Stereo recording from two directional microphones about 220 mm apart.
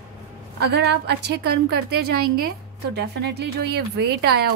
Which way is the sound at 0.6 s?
50° right (ahead or behind).